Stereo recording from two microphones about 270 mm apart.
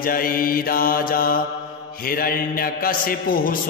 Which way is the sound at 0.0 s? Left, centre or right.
Left.